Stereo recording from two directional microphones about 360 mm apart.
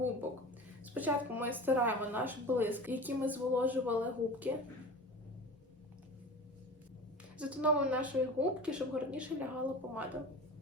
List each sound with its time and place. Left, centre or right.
0.9 s a woman's voice: centre
7.3 s a woman's voice: centre